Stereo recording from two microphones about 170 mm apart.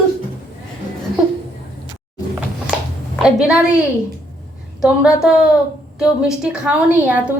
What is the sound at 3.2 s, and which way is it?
A woman's voice, 5° right (ahead or behind).